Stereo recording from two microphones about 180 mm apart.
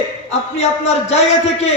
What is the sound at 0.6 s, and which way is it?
A man's voice, 35° left (ahead or behind).